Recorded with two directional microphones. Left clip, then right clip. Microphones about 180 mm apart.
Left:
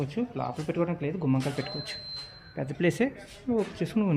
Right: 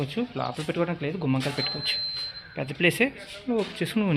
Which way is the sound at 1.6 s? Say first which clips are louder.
Right 9 dB; 20° left (ahead or behind).